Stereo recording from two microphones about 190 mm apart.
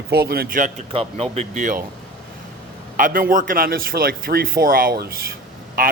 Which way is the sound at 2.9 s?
45° right (ahead or behind).